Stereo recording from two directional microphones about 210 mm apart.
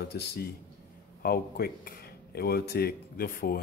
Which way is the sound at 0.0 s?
50° left (ahead or behind).